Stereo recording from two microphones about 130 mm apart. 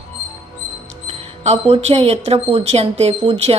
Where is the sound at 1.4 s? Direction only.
55° right (ahead or behind).